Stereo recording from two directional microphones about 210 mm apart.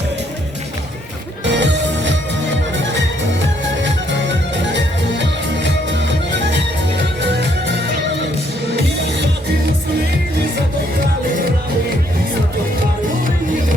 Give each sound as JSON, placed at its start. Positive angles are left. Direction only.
{"t": 1.5, "sound": "music", "side_deg": -55}
{"t": 3.8, "sound": "music", "side_deg": -60}